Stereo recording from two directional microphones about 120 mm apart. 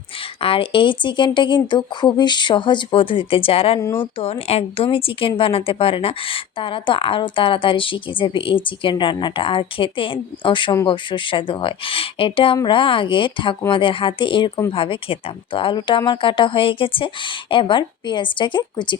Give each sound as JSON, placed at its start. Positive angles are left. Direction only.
{"t": 0.4, "sound": "a woman's voice", "side_deg": 50}
{"t": 3.8, "sound": "speech", "side_deg": 25}
{"t": 4.0, "sound": "a woman's voice", "side_deg": 55}